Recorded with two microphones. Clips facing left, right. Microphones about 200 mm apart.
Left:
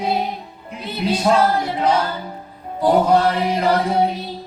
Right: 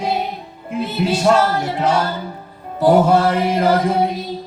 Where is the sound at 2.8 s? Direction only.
45° right (ahead or behind).